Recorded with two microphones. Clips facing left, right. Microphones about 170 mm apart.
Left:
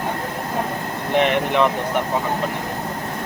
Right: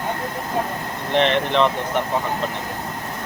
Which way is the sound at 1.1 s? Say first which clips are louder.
Even; 10° left (ahead or behind).